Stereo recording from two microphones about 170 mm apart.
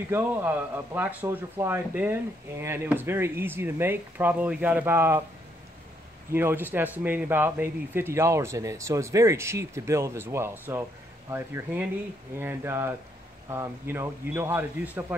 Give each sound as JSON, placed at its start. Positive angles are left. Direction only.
{"t": 0.1, "sound": "speech", "side_deg": -10}
{"t": 6.3, "sound": "speech", "side_deg": -10}